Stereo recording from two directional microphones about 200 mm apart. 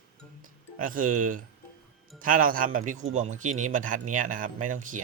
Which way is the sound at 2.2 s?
45° right (ahead or behind).